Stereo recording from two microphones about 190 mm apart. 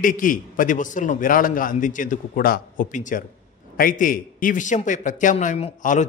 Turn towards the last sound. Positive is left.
turn(degrees=40)  # may be behind; listen again after turning